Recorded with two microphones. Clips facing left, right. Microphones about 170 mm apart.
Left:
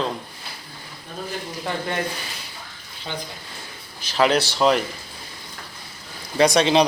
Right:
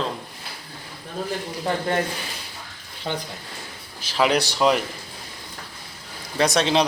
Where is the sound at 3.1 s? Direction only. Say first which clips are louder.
Right 4 dB; 50° right (ahead or behind).